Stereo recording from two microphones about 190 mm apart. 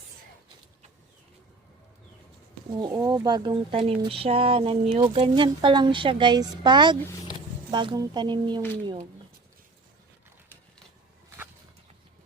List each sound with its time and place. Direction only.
2.8 s speech: 20° right (ahead or behind)